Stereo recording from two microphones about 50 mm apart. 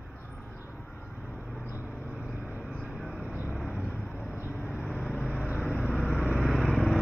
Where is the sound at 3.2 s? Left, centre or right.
Right.